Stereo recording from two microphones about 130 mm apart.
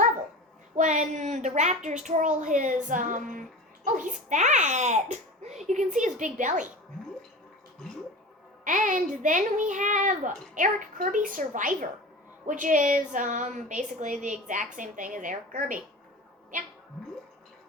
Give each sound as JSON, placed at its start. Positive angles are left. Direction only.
{"t": 0.8, "sound": "a sound", "side_deg": -70}
{"t": 2.0, "sound": "a woman's voice", "side_deg": -75}
{"t": 8.6, "sound": "a woman's voice", "side_deg": -85}